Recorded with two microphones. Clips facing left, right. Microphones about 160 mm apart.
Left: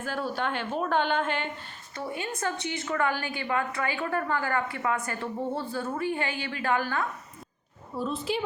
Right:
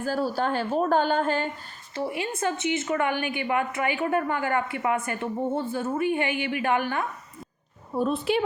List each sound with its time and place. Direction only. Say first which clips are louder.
0.0 s a woman's voice: right 5 dB; 40° right (ahead or behind)
2.0 s a woman's voice: right 4 dB; 25° right (ahead or behind)
7.9 s a woman's voice: right 6 dB; 60° right (ahead or behind)